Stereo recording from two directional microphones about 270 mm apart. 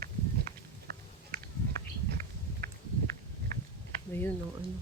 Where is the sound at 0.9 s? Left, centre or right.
Right.